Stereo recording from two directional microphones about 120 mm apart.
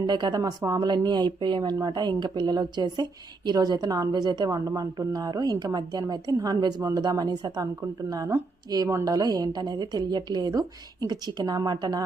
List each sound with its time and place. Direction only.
0.1 s speech: 35° right (ahead or behind)